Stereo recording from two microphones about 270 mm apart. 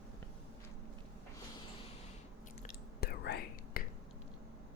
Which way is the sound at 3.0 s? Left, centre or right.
Left.